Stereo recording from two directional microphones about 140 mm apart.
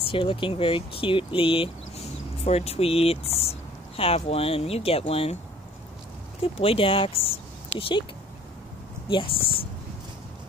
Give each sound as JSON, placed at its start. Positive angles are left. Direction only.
{"t": 0.0, "sound": "speech", "side_deg": 40}
{"t": 6.4, "sound": "speech", "side_deg": 40}
{"t": 9.1, "sound": "speech", "side_deg": 40}